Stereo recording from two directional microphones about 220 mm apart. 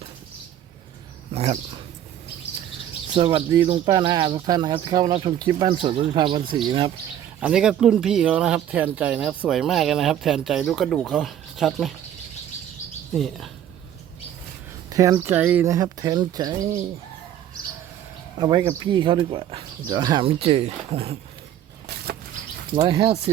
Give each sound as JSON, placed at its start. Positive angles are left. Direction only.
{"t": 1.3, "sound": "speech", "side_deg": -30}
{"t": 3.2, "sound": "speech", "side_deg": -25}
{"t": 7.3, "sound": "speech", "side_deg": -5}
{"t": 13.1, "sound": "speech", "side_deg": 0}
{"t": 14.8, "sound": "speech", "side_deg": -15}
{"t": 18.3, "sound": "speech", "side_deg": -20}
{"t": 22.7, "sound": "speech", "side_deg": -20}